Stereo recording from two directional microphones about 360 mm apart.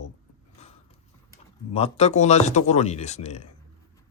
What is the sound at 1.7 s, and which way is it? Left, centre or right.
Speech, centre.